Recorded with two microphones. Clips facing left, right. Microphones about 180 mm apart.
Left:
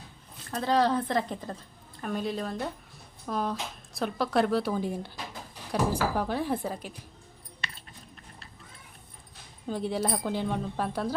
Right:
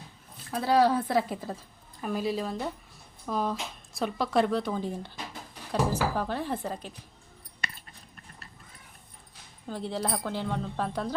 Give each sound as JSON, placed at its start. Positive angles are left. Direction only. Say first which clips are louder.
{"t": 0.5, "sound": "a woman's voice", "louder": "right 2 dB", "side_deg": -10}
{"t": 9.6, "sound": "a woman's voice", "louder": "left 3 dB", "side_deg": 15}